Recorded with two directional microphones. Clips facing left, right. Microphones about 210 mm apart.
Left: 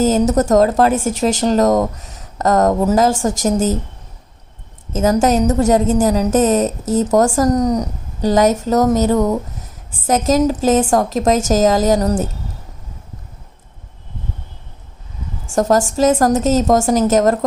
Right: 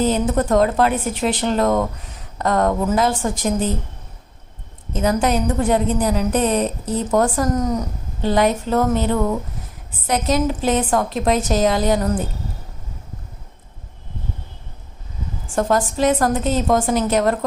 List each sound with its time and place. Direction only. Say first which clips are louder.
0.0 s a woman's voice: left 4 dB; 45° left (ahead or behind)
4.9 s a woman's voice: left 4 dB; 45° left (ahead or behind)
15.5 s a woman's voice: left 4 dB; 40° left (ahead or behind)